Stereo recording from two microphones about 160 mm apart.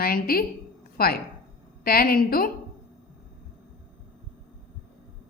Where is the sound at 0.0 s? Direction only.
65° left (ahead or behind).